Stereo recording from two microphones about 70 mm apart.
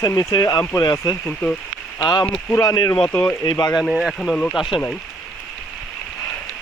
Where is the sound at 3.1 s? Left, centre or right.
Left.